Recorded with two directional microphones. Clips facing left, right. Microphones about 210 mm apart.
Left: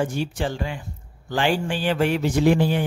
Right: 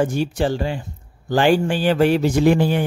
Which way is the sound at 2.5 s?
55° right (ahead or behind).